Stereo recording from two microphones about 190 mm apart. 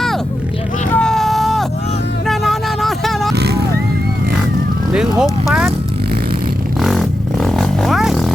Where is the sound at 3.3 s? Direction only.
60° right (ahead or behind).